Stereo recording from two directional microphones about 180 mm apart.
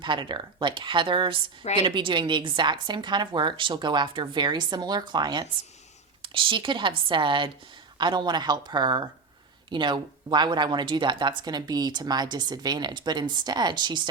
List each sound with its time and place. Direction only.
0.0 s speech: 25° right (ahead or behind)